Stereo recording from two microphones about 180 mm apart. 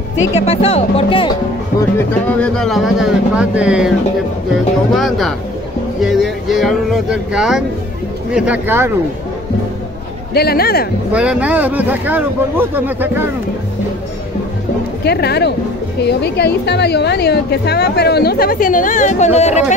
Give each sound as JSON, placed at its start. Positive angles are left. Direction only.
{"t": 0.5, "sound": "speech", "side_deg": 35}
{"t": 2.2, "sound": "speech", "side_deg": 5}
{"t": 4.9, "sound": "a man's voice", "side_deg": 0}
{"t": 10.3, "sound": "a woman's voice", "side_deg": 60}
{"t": 11.1, "sound": "a man's voice", "side_deg": -5}
{"t": 15.0, "sound": "a woman's voice", "side_deg": 65}